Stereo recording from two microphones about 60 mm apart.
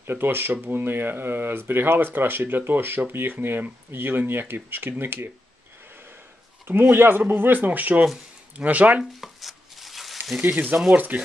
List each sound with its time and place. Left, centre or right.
0.0 s speech: right
6.7 s speech: right
9.2 s a sound: centre
10.5 s speech: right